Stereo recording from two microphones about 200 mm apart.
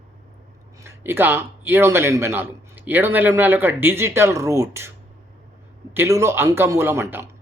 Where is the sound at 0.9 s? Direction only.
10° right (ahead or behind).